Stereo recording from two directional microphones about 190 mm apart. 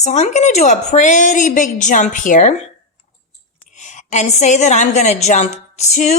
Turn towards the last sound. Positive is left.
turn(degrees=35)  # may be behind; listen again after turning